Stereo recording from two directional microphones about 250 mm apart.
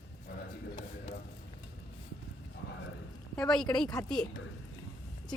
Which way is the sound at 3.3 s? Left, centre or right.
Centre.